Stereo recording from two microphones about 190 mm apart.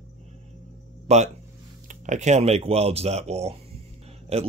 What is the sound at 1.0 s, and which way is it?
Speech, 35° right (ahead or behind).